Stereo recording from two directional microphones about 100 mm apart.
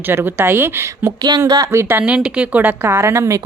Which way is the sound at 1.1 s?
40° right (ahead or behind).